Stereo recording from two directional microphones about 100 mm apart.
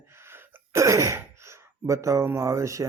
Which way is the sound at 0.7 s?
30° right (ahead or behind).